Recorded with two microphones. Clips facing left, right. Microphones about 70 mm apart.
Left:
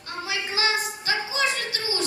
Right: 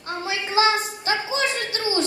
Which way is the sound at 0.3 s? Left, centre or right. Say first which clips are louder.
Right 6 dB; right.